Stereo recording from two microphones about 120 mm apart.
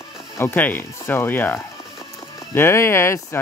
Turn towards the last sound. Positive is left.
turn(degrees=20)  # may be behind; listen again after turning